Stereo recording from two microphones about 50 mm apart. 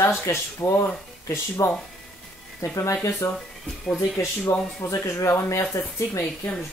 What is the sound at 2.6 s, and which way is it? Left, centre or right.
Speech, left.